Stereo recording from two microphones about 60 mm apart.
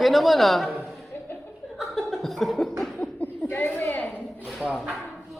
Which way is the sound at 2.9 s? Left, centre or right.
Left.